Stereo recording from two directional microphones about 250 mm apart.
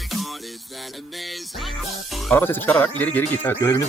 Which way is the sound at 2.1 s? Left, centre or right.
Centre.